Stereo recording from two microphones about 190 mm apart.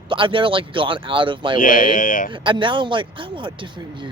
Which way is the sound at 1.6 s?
45° left (ahead or behind).